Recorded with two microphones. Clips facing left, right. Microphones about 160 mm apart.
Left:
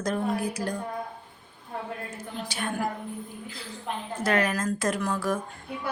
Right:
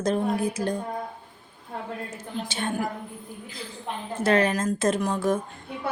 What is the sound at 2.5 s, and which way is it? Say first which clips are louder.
Speech: right 2 dB; 25° right (ahead or behind).